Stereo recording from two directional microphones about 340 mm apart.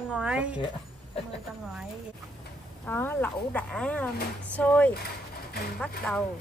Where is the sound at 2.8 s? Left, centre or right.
Centre.